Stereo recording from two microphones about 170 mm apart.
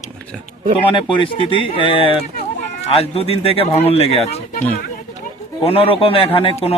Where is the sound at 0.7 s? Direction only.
30° left (ahead or behind).